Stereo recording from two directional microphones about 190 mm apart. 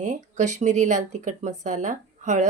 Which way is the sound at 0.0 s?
40° right (ahead or behind).